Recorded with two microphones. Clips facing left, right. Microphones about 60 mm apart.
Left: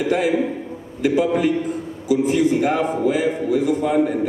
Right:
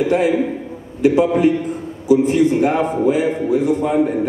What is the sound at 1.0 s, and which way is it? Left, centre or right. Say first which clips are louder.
A man's voice: right 4 dB; right.